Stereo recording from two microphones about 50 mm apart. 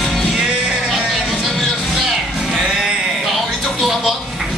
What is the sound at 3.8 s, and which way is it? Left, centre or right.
Television, centre.